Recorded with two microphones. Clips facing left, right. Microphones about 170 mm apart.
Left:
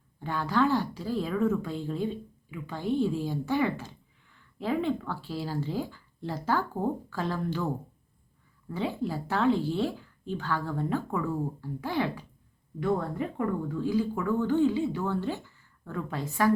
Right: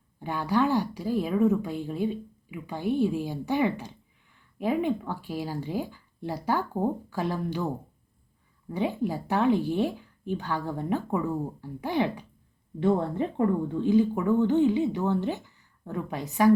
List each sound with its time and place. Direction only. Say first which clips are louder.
0.2 s speech: right 1 dB; 15° right (ahead or behind)
8.7 s speech: right 3 dB; 15° right (ahead or behind)
12.8 s a woman's voice: right 4 dB; 30° right (ahead or behind)